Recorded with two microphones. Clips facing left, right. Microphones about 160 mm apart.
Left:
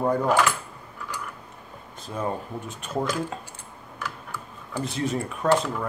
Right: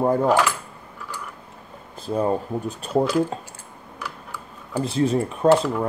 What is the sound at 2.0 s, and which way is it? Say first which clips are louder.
Speech: right 7 dB; 35° right (ahead or behind).